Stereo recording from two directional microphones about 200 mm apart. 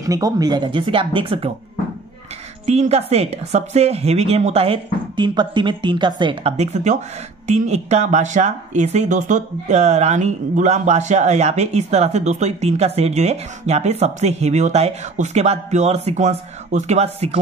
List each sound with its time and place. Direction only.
0.0 s speech: 15° right (ahead or behind)
2.6 s speech: 35° right (ahead or behind)
6.5 s speech: 35° right (ahead or behind)